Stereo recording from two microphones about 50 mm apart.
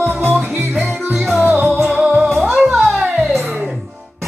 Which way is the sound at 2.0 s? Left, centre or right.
Right.